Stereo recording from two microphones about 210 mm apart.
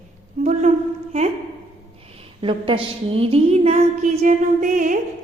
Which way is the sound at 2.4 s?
25° right (ahead or behind).